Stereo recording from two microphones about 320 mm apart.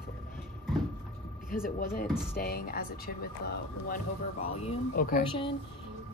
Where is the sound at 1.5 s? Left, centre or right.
Left.